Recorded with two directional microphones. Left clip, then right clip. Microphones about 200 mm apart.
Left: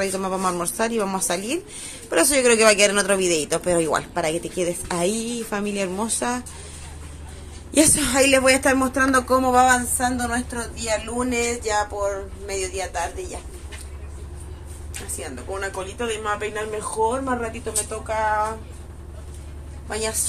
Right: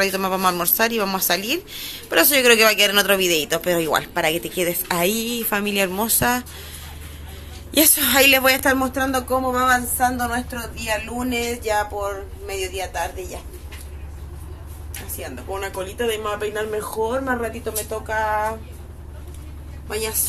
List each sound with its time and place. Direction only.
0.0 s a woman's voice: centre (ahead or behind)
7.7 s a woman's voice: 5° left (ahead or behind)
8.6 s speech: 20° left (ahead or behind)
9.7 s a woman's voice: 5° left (ahead or behind)
15.1 s speech: centre (ahead or behind)
19.9 s a woman's voice: centre (ahead or behind)